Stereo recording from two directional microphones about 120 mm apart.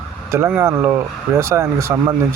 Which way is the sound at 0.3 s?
15° right (ahead or behind).